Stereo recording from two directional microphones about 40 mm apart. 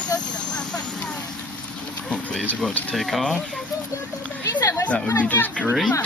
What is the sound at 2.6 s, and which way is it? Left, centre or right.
Speech, centre.